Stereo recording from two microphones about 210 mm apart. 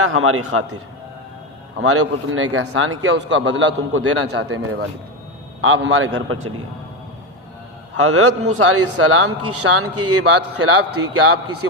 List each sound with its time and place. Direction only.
0.0 s a man's voice: 80° right
1.8 s speech: 90° right
4.3 s a man's voice: 65° right (ahead or behind)
7.9 s a man's voice: 90° right